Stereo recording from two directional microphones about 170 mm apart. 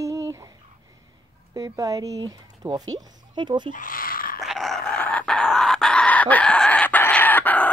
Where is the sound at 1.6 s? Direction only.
20° right (ahead or behind).